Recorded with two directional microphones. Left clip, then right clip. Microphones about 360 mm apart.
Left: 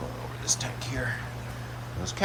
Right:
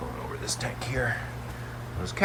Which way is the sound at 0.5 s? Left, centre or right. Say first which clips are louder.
Right 3 dB; centre.